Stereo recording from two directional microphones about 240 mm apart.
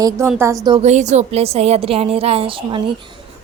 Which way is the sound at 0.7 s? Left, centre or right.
Right.